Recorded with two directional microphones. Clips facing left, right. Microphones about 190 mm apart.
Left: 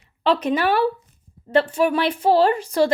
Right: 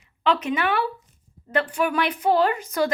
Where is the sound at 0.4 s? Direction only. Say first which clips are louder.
Left 5 dB; 35° left (ahead or behind).